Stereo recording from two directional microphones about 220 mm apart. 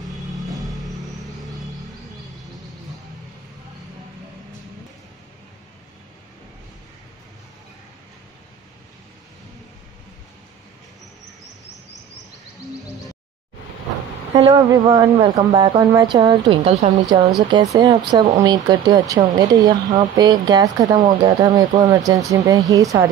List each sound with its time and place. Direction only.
0.5 s music: centre (ahead or behind)
14.3 s speech: 15° right (ahead or behind)